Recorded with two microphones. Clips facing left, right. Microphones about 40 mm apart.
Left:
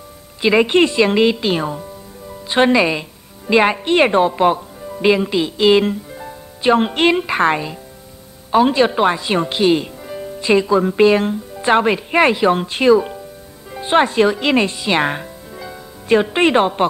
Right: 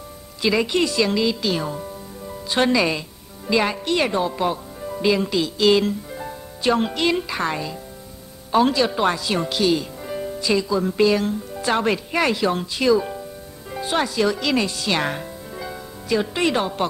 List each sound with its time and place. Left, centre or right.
0.4 s a woman's voice: left
5.0 s speech: left
8.5 s speech: left
10.0 s music: centre
10.4 s speech: left
15.5 s music: centre
16.1 s speech: left